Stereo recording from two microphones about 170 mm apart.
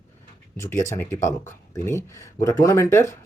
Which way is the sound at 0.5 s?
15° left (ahead or behind).